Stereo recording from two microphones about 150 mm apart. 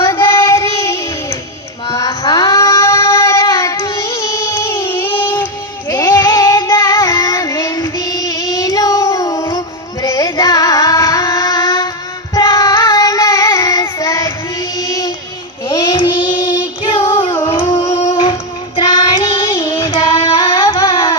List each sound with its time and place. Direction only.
0.3 s child singing: 20° left (ahead or behind)
10.0 s music: 20° left (ahead or behind)
12.3 s child singing: 20° left (ahead or behind)
14.8 s a sound: 20° left (ahead or behind)
15.7 s child singing: 35° left (ahead or behind)
17.3 s humming: 20° left (ahead or behind)
17.6 s singing: 35° left (ahead or behind)
17.8 s humming: 20° left (ahead or behind)
18.9 s child singing: 25° left (ahead or behind)
20.7 s a sound: 25° left (ahead or behind)